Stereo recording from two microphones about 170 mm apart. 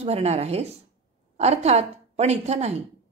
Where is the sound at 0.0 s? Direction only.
40° right (ahead or behind).